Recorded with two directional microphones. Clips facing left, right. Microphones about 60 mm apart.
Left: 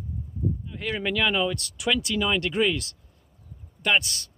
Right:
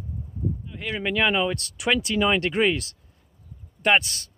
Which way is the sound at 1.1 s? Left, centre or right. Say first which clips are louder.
Right 3 dB; right.